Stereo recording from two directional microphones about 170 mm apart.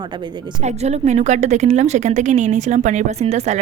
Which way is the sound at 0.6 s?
40° right (ahead or behind).